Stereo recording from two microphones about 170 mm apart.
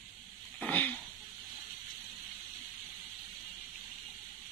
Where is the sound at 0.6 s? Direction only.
10° left (ahead or behind).